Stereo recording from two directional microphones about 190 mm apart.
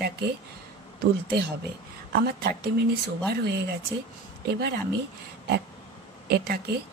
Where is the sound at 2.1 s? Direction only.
55° right (ahead or behind).